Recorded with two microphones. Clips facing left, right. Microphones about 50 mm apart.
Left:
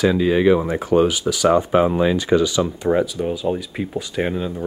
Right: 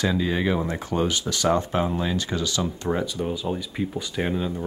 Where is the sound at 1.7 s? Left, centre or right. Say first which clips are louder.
Left 8 dB; left.